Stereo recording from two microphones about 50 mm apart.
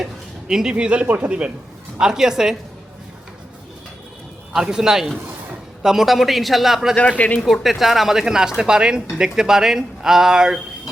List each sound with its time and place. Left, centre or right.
0.0 s speech: centre
1.0 s speech: right
2.0 s speech: centre
4.6 s a man's voice: centre
6.9 s speech: left
7.4 s speech: centre